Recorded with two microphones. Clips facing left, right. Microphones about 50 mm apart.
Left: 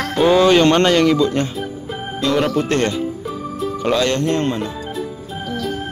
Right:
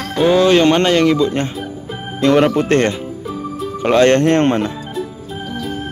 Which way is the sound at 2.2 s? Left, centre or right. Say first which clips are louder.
Right 5 dB; right.